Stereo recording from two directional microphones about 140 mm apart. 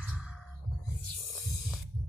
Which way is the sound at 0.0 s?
5° right (ahead or behind).